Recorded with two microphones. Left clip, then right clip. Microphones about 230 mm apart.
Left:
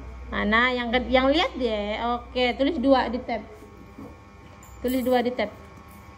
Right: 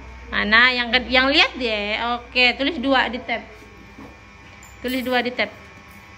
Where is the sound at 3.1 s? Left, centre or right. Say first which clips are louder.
Right 3 dB; right.